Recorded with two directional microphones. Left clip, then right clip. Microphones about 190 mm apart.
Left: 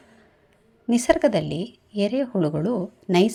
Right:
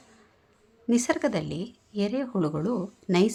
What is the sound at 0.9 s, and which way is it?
A woman's voice, 10° left (ahead or behind).